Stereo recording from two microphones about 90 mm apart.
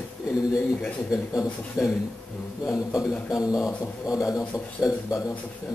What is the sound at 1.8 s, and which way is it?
Speech, 10° right (ahead or behind).